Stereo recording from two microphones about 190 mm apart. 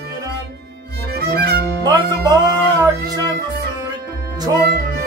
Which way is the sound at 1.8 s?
20° right (ahead or behind).